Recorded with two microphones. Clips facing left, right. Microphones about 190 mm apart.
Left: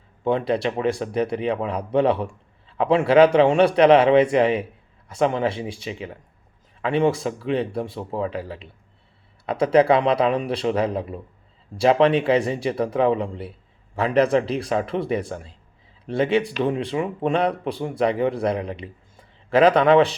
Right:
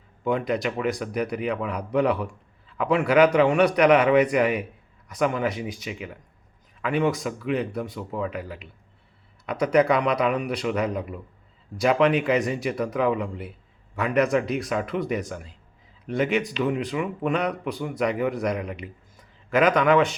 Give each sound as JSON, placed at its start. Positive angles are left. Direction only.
{"t": 0.3, "sound": "speech", "side_deg": 30}